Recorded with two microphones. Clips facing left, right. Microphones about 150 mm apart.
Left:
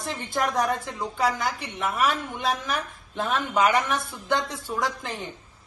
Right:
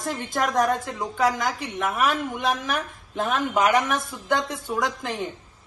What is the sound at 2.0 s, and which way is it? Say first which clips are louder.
A woman's voice: right 2 dB; 45° right (ahead or behind).